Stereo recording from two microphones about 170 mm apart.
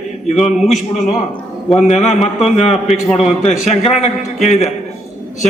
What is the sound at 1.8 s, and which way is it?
A man's voice, 40° left (ahead or behind).